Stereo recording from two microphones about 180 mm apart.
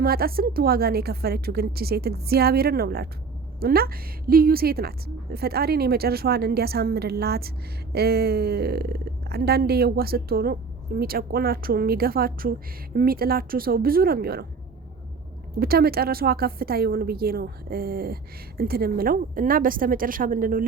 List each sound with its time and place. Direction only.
0.0 s a woman's voice: 55° right (ahead or behind)
15.5 s a woman's voice: 55° right (ahead or behind)